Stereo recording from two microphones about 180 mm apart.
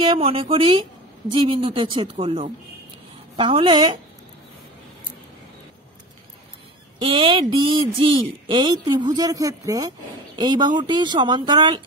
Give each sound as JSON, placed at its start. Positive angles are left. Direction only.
{"t": 0.0, "sound": "speech", "side_deg": -30}
{"t": 7.0, "sound": "speech", "side_deg": -30}